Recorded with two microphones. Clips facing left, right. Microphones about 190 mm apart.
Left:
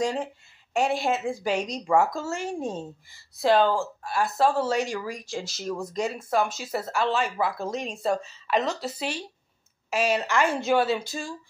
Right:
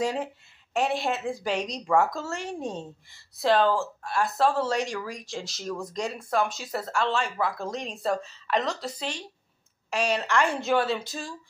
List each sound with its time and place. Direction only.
0.0 s speech: 5° right (ahead or behind)